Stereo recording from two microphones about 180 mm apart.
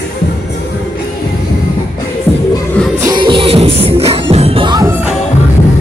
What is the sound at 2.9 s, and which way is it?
Music, 20° right (ahead or behind).